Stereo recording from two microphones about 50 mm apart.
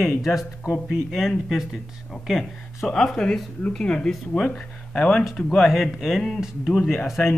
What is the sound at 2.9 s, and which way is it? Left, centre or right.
Speech, centre.